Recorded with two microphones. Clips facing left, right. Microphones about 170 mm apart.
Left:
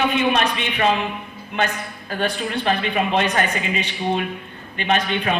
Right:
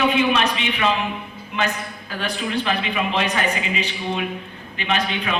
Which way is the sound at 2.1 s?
55° left (ahead or behind).